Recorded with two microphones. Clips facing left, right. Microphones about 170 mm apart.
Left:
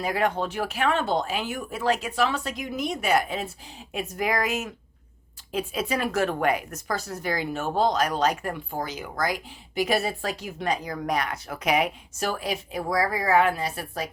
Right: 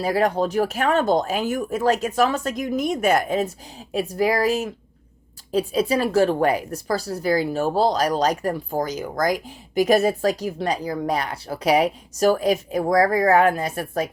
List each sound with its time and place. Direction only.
0.0 s speech: 35° right (ahead or behind)
3.9 s speech: 35° right (ahead or behind)